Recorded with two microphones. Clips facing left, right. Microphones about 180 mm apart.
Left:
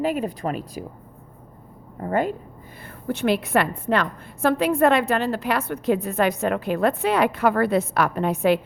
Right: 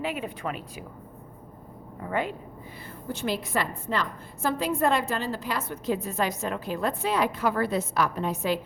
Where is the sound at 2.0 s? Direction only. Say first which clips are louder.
Left 6 dB; 45° left (ahead or behind).